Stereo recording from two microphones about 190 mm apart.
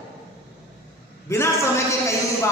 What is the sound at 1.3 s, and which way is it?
Speech, 15° left (ahead or behind).